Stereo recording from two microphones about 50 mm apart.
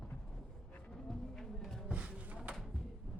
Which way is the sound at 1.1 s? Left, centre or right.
Centre.